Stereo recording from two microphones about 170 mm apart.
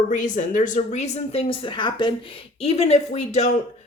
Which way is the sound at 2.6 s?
40° left (ahead or behind).